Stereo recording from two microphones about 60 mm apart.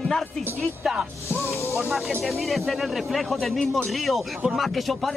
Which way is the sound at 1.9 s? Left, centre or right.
Centre.